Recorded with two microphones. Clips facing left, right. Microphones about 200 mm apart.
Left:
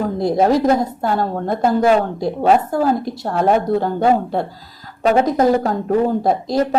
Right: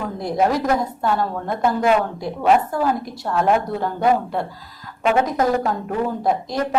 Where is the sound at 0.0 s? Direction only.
30° left (ahead or behind).